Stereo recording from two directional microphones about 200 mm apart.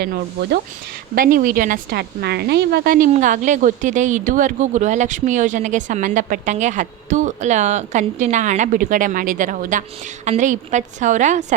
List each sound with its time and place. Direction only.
0.0 s speech: 50° right (ahead or behind)